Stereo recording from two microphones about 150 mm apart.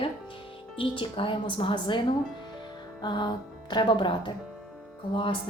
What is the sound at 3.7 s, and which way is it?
Speech, 30° left (ahead or behind).